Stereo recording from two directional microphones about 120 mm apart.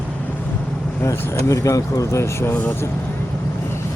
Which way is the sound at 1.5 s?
25° left (ahead or behind).